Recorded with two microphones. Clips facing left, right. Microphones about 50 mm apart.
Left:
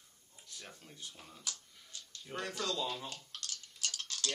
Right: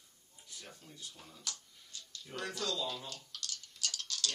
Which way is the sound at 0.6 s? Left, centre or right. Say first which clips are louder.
Even; left.